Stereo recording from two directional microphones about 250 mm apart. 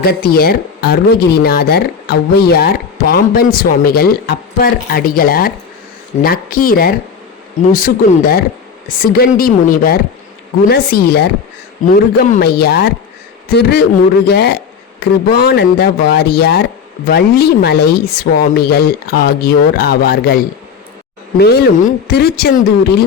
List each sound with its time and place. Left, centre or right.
0.0 s speech: left